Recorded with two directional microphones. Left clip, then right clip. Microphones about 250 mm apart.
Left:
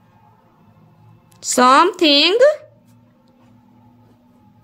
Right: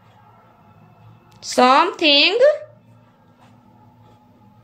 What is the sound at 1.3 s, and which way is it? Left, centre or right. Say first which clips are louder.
A woman's voice: left 2 dB; left.